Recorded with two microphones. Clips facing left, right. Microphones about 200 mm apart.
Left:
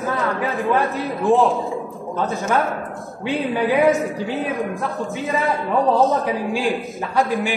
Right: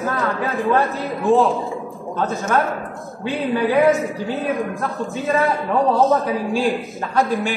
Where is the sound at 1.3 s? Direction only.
15° left (ahead or behind).